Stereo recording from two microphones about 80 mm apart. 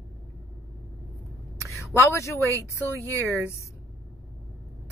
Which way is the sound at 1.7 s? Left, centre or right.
Left.